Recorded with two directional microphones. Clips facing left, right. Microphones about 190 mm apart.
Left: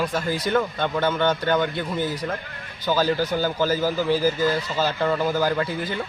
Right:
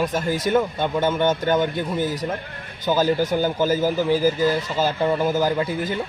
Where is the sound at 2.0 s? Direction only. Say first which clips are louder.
Right 2 dB; 40° right (ahead or behind).